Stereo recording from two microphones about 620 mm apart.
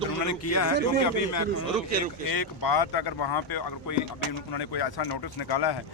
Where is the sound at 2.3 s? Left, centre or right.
Left.